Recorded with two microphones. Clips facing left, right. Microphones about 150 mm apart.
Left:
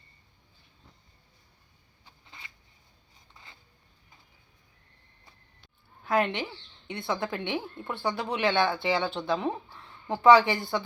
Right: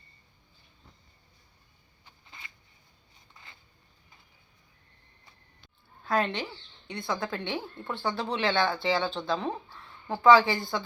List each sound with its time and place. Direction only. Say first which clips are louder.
6.1 s a woman's voice: left 2 dB; 15° left (ahead or behind)